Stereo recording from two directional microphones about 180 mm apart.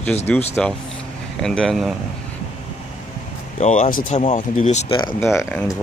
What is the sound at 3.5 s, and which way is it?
Speech, 40° left (ahead or behind).